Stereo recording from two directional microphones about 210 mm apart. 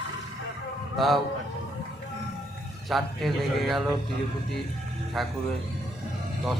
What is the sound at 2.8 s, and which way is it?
Speech, centre (ahead or behind).